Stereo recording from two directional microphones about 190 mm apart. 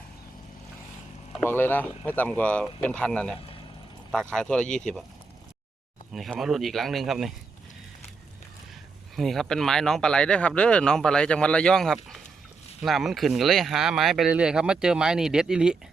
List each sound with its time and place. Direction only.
1.3 s speech: 10° left (ahead or behind)
6.1 s speech: centre (ahead or behind)
9.1 s speech: centre (ahead or behind)